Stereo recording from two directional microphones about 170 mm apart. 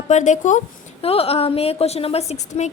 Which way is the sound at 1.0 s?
35° left (ahead or behind).